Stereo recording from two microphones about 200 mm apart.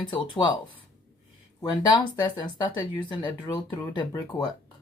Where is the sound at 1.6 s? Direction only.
20° left (ahead or behind).